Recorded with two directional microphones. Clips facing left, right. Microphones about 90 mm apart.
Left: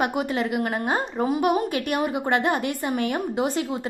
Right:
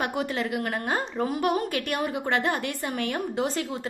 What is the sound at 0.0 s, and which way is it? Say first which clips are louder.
A woman's voice: left 4 dB; 15° left (ahead or behind).